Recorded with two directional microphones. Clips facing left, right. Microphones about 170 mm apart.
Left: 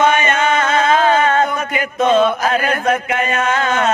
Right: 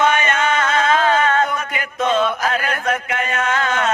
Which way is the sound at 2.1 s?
30° left (ahead or behind).